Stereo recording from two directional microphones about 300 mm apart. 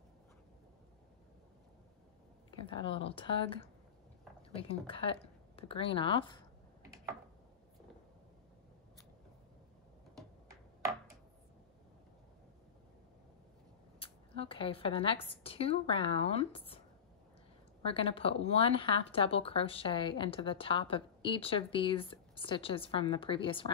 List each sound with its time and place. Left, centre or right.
2.6 s speech: centre
6.8 s a sound: centre
13.9 s speech: centre
17.8 s speech: centre